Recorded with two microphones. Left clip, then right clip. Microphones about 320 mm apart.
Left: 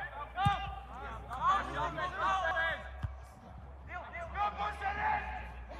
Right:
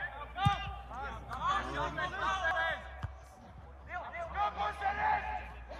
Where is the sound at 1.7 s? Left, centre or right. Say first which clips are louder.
Even; left.